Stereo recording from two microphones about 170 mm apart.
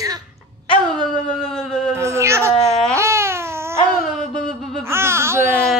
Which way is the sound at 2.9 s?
15° right (ahead or behind).